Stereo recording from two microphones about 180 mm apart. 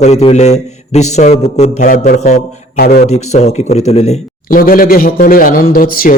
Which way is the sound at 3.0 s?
40° left (ahead or behind).